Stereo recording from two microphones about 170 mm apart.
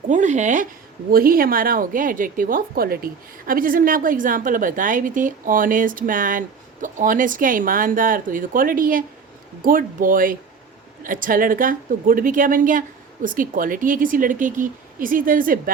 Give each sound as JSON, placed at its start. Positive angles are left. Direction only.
{"t": 0.1, "sound": "a woman's voice", "side_deg": -45}